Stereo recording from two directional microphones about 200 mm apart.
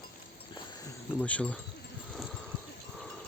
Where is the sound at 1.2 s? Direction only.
5° left (ahead or behind).